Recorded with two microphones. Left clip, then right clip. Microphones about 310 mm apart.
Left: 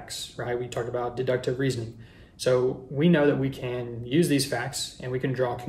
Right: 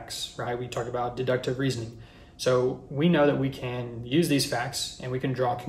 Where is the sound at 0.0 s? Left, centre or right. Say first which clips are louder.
Right 1 dB; centre.